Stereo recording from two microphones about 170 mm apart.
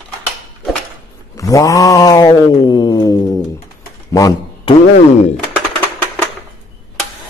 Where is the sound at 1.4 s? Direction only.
20° left (ahead or behind).